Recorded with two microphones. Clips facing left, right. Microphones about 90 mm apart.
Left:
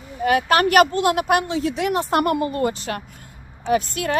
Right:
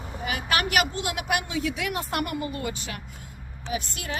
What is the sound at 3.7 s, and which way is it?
Speech, 50° left (ahead or behind).